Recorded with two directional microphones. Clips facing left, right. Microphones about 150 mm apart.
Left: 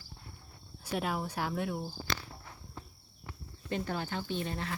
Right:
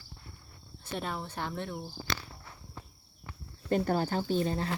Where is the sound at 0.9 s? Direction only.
5° left (ahead or behind).